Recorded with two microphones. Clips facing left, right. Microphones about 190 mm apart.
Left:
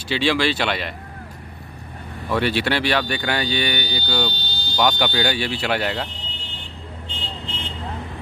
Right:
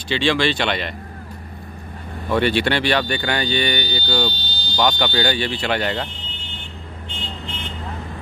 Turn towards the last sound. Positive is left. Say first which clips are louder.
# right 1 dB
turn(degrees=30)  # may be behind; listen again after turning